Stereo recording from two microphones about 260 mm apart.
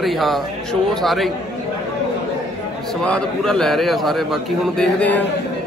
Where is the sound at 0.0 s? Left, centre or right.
Centre.